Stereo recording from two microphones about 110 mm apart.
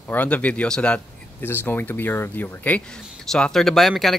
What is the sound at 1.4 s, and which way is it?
Speech, 20° left (ahead or behind).